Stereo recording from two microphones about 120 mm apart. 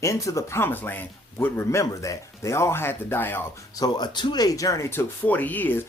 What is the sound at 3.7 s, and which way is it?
Speech, 35° left (ahead or behind).